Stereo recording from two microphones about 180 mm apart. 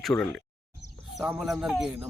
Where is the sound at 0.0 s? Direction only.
5° left (ahead or behind).